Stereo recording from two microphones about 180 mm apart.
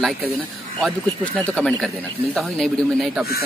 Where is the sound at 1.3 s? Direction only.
10° left (ahead or behind).